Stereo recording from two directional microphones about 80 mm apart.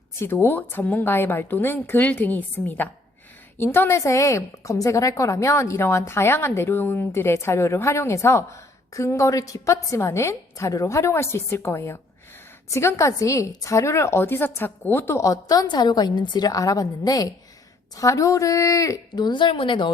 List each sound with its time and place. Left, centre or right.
0.2 s a woman's voice: left
15.7 s a woman's voice: left
19.2 s speech: left